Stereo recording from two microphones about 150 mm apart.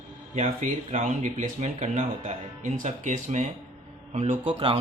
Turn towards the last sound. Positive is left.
turn(degrees=-40)  # may be behind; listen again after turning